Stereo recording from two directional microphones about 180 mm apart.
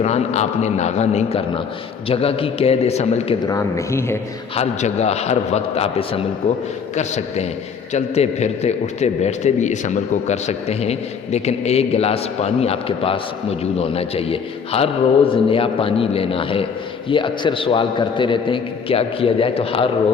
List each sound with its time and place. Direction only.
0.0 s a man's voice: 40° left (ahead or behind)
3.4 s speech: 15° left (ahead or behind)
4.5 s a man's voice: 35° left (ahead or behind)